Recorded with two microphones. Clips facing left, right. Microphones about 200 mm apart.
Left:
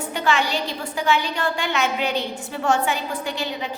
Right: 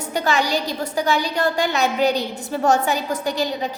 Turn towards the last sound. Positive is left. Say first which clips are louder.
# right 5 dB
turn(degrees=-40)  # may be behind; listen again after turning